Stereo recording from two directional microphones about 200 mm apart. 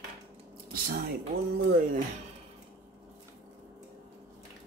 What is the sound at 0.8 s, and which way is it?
Speech, 50° right (ahead or behind).